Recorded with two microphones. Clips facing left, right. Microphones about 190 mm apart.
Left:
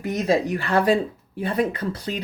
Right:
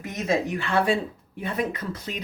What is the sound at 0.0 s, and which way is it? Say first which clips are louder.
Speech: left 4 dB; 35° left (ahead or behind).